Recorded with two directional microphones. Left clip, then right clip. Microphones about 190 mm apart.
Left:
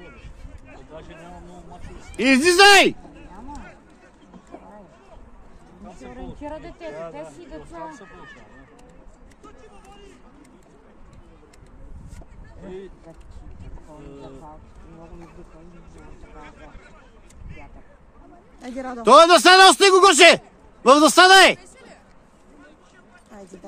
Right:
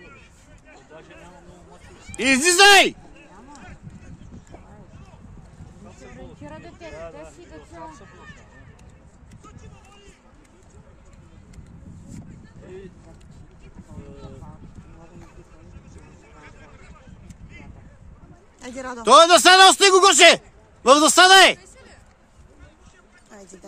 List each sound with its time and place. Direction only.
0.9 s a man's voice: 60° left (ahead or behind)
2.1 s a man's voice: 5° right (ahead or behind)
5.9 s a sound: 60° left (ahead or behind)
12.6 s a sound: 60° left (ahead or behind)
16.3 s vehicle: 60° left (ahead or behind)
18.8 s speech: 50° right (ahead or behind)
19.0 s a man's voice: centre (ahead or behind)